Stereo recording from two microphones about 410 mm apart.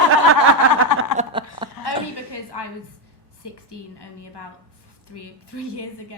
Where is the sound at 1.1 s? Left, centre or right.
Centre.